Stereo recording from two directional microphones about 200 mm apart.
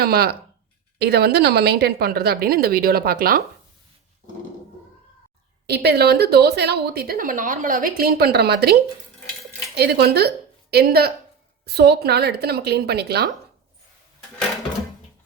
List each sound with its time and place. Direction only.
0.0 s a woman's voice: 50° right (ahead or behind)
5.6 s a woman's voice: 55° right (ahead or behind)